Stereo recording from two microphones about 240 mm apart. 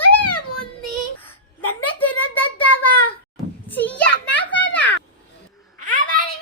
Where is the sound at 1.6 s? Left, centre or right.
Left.